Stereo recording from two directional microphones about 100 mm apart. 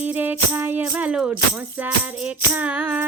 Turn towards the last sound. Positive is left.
turn(degrees=-20)  # may be behind; listen again after turning